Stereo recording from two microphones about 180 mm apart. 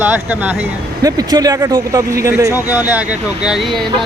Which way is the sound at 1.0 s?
20° right (ahead or behind).